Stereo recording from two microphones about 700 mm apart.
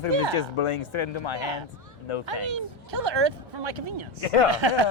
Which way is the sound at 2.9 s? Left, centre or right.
Right.